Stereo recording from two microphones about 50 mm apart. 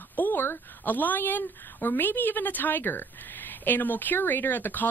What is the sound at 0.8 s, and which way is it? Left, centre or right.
Speech, left.